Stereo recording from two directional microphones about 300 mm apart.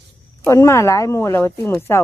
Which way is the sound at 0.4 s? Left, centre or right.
Centre.